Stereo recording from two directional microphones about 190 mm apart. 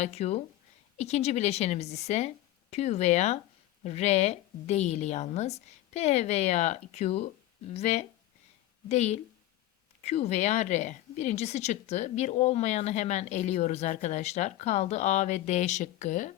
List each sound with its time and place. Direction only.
0.0 s a woman's voice: 35° left (ahead or behind)